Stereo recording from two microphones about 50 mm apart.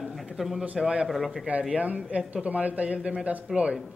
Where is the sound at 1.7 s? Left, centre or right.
Right.